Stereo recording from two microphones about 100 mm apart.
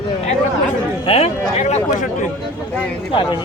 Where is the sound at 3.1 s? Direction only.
55° left (ahead or behind).